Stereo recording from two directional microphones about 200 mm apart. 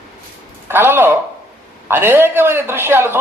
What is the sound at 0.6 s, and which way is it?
Speech, 10° right (ahead or behind).